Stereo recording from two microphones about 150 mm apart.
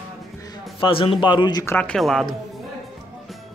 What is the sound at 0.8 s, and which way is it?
Speech, 35° left (ahead or behind).